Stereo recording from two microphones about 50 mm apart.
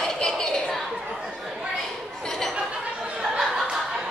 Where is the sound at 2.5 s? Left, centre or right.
Centre.